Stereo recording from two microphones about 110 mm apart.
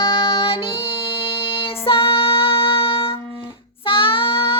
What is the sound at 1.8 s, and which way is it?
Music, 55° left (ahead or behind).